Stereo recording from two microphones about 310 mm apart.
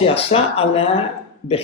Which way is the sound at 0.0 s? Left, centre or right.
Centre.